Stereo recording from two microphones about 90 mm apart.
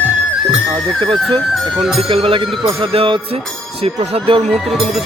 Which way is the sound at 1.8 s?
Centre (ahead or behind).